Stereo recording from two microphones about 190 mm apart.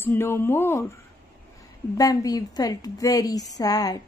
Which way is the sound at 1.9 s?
20° left (ahead or behind).